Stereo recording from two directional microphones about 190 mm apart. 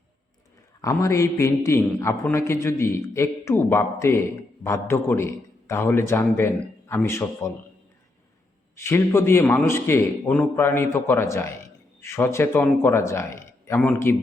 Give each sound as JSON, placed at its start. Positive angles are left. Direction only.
{"t": 0.8, "sound": "a man's voice", "side_deg": 15}
{"t": 8.7, "sound": "a man's voice", "side_deg": 15}